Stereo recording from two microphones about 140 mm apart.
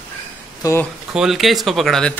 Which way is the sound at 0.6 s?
20° left (ahead or behind).